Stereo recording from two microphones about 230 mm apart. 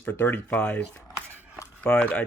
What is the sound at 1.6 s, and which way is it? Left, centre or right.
Speech, centre.